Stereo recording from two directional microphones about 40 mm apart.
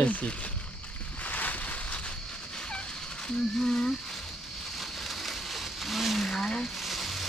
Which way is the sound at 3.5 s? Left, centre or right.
Centre.